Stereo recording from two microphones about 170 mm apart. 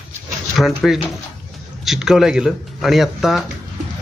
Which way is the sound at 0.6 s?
Centre (ahead or behind).